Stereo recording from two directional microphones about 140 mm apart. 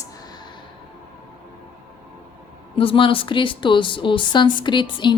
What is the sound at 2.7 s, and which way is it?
A woman's voice, 40° left (ahead or behind).